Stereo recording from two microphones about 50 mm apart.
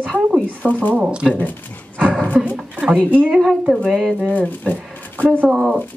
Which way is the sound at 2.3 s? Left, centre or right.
Right.